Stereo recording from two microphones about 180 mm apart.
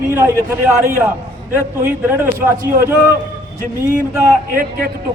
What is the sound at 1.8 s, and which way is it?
Speech, 10° right (ahead or behind).